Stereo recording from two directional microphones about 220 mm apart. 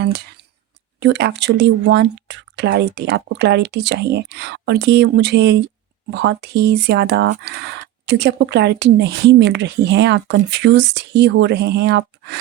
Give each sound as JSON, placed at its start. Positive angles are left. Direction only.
{"t": 0.0, "sound": "speech", "side_deg": -50}